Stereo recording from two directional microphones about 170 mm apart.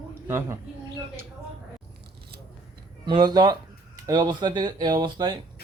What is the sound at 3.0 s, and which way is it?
A man's voice, 25° right (ahead or behind).